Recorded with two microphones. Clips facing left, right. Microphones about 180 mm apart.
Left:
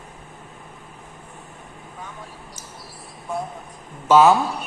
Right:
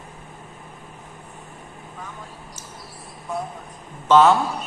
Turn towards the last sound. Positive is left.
turn(degrees=5)  # may be behind; listen again after turning